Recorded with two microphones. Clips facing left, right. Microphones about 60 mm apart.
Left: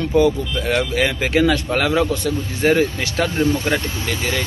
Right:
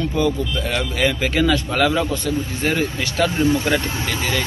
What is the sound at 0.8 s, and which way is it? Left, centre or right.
Speech, left.